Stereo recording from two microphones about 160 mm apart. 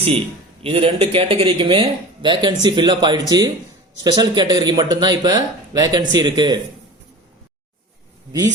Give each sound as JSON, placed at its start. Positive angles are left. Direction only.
{"t": 0.6, "sound": "speech", "side_deg": -35}